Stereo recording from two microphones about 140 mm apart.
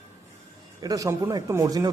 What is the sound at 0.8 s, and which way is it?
Speech, 25° right (ahead or behind).